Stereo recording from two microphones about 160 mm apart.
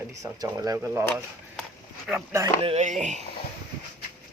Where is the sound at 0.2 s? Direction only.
20° right (ahead or behind).